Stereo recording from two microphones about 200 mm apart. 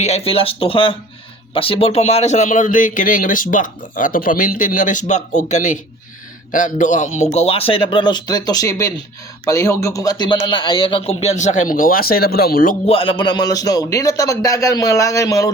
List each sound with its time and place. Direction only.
0.0 s speech: 30° left (ahead or behind)
12.9 s a man's voice: 25° left (ahead or behind)